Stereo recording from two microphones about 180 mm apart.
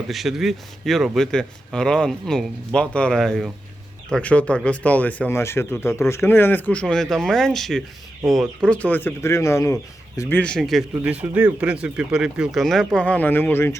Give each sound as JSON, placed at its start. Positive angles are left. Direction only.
{"t": 0.1, "sound": "speech", "side_deg": 0}